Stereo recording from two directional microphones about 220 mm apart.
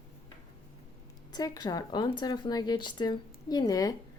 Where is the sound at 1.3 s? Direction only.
15° left (ahead or behind).